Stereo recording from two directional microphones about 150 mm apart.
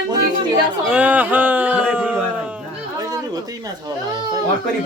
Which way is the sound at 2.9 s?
25° right (ahead or behind).